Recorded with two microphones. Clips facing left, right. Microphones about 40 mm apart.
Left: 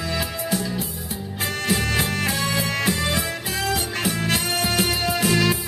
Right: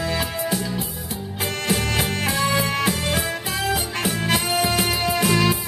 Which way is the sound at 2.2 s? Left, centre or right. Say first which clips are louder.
Right 2 dB; centre.